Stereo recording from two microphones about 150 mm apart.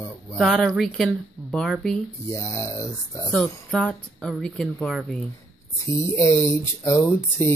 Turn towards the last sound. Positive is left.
turn(degrees=15)  # may be behind; listen again after turning